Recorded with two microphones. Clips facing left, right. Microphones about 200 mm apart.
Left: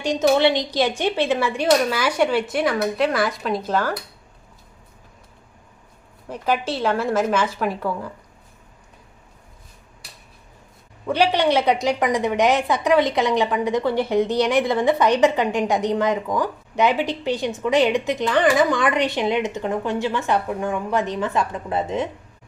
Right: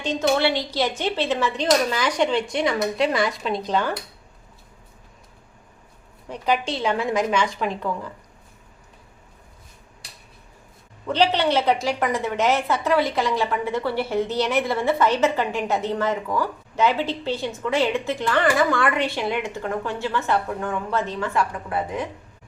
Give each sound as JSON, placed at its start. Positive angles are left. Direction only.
{"t": 0.0, "sound": "a woman's voice", "side_deg": 15}
{"t": 6.2, "sound": "a woman's voice", "side_deg": 5}
{"t": 11.0, "sound": "a woman's voice", "side_deg": 10}